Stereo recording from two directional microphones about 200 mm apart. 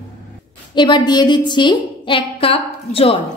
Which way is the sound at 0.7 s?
25° left (ahead or behind).